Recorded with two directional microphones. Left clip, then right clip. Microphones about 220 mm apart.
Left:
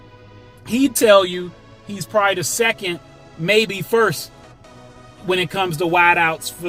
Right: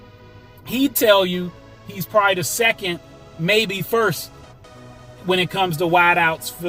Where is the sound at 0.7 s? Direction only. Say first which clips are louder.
Left 3 dB; 15° left (ahead or behind).